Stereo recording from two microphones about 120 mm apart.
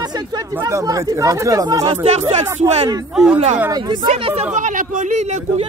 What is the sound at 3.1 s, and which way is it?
Speech, 5° right (ahead or behind).